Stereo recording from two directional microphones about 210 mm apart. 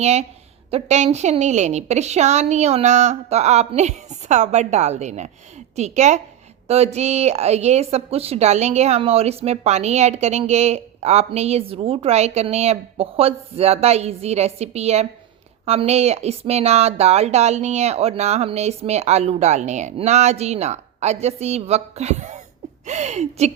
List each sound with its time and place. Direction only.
0.0 s a woman's voice: 30° right (ahead or behind)